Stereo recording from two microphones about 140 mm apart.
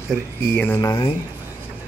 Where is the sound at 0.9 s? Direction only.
35° left (ahead or behind).